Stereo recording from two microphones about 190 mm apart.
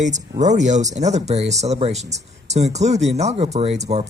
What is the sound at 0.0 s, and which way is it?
Speech, 40° right (ahead or behind).